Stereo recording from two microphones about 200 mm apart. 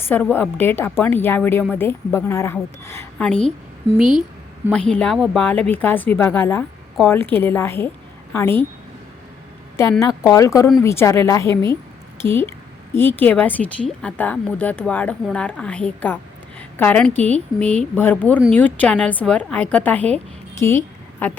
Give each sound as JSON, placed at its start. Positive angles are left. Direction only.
{"t": 0.1, "sound": "a woman's voice", "side_deg": 10}
{"t": 10.0, "sound": "a woman's voice", "side_deg": 15}